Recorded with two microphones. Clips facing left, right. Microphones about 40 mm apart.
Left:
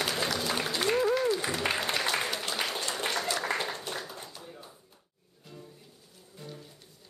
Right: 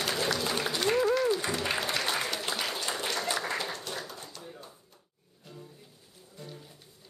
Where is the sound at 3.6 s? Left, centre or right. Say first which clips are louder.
Left 1 dB; centre.